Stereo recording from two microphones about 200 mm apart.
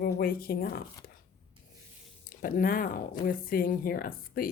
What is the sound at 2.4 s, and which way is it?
Speech, 45° left (ahead or behind).